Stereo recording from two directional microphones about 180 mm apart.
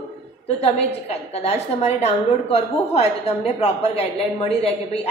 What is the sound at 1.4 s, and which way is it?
A woman's voice, 35° left (ahead or behind).